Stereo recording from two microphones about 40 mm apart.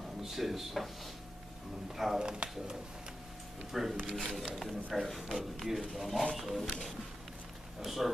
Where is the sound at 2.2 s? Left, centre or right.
Centre.